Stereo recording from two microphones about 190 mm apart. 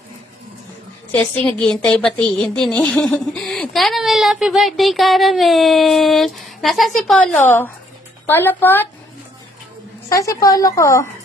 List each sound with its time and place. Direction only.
1.1 s a woman's voice: 5° left (ahead or behind)
10.2 s a woman's voice: 20° left (ahead or behind)